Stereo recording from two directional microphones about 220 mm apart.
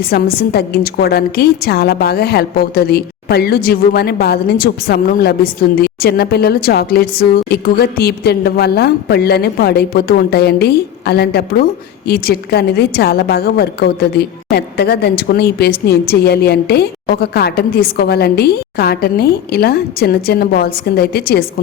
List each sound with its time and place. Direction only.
0.1 s a woman's voice: 45° left (ahead or behind)